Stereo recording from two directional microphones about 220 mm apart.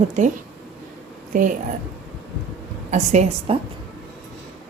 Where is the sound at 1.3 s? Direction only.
35° right (ahead or behind).